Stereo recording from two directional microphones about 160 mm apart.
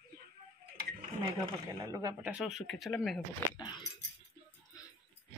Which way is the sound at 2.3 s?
5° right (ahead or behind).